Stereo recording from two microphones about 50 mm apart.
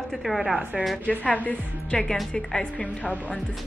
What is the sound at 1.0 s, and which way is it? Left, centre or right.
Speech, left.